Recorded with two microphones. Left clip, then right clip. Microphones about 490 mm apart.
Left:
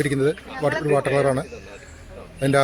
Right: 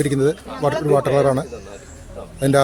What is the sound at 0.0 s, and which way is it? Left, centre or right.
A man's voice, left.